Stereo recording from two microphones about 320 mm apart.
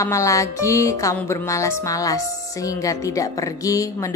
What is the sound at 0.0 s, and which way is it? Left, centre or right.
Speech, centre.